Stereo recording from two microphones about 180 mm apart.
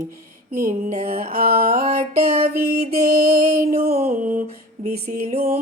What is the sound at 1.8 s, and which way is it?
Music, 35° right (ahead or behind).